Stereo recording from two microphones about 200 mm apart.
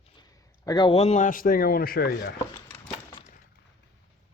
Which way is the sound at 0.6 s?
20° left (ahead or behind).